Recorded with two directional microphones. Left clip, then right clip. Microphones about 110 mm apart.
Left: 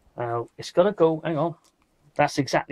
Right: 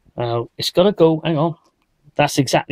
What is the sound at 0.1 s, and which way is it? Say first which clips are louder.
Speech: right 6 dB; 30° right (ahead or behind).